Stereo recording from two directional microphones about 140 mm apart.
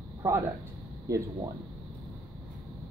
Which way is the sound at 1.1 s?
25° right (ahead or behind).